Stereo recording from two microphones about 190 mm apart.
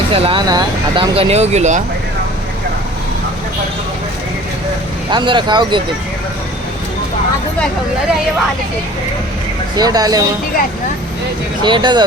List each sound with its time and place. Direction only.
0.1 s speech: 30° right (ahead or behind)
5.1 s speech: 25° right (ahead or behind)
9.7 s speech: 20° right (ahead or behind)
11.6 s speech: 25° right (ahead or behind)